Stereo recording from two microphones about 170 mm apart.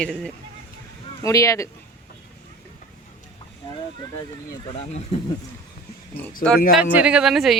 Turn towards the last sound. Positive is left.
turn(degrees=0)  # may be behind; listen again after turning